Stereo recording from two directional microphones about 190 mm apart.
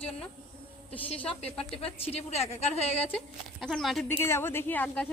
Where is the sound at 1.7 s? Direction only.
30° left (ahead or behind).